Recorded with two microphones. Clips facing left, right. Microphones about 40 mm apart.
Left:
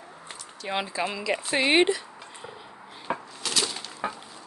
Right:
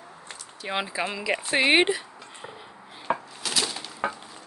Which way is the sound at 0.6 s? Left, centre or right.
Centre.